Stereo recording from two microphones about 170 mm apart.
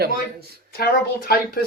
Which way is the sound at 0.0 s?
70° right (ahead or behind).